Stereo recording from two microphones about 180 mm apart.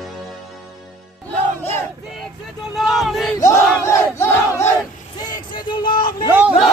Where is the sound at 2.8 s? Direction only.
Centre (ahead or behind).